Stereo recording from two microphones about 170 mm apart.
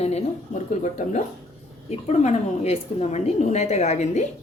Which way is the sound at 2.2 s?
40° left (ahead or behind).